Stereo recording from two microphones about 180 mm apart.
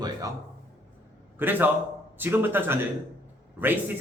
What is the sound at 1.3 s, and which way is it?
Speech, 10° right (ahead or behind).